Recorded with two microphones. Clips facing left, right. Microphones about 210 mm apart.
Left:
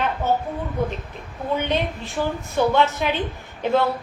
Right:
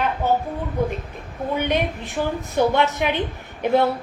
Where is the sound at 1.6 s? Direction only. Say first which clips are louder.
Right 2 dB; 10° right (ahead or behind).